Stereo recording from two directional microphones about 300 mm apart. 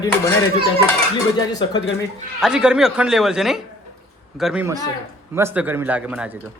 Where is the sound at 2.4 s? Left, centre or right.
Centre.